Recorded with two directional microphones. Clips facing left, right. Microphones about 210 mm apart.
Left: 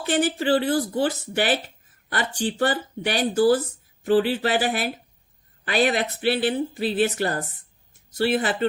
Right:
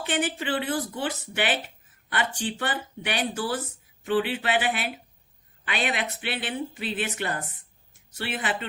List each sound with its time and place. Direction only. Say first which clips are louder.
0.0 s speech: left 6 dB; 35° left (ahead or behind)